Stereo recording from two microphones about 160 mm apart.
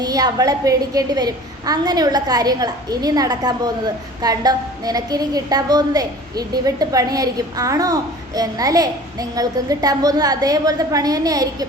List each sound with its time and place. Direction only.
0.0 s a woman's voice: 25° right (ahead or behind)